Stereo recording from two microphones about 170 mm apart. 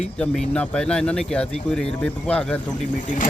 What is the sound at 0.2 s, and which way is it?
Speech, 5° left (ahead or behind).